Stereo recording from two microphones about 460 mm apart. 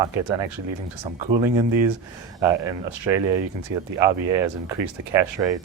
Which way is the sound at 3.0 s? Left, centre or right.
Right.